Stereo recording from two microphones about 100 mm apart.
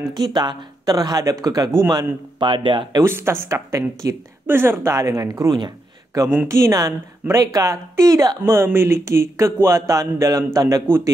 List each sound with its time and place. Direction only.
0.1 s speech: 45° right (ahead or behind)
2.4 s speech: 55° right (ahead or behind)
3.0 s speech: 25° right (ahead or behind)
8.5 s speech: 25° right (ahead or behind)